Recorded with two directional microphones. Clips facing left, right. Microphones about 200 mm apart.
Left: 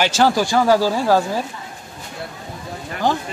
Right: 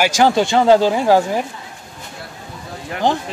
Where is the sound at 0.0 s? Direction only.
15° right (ahead or behind).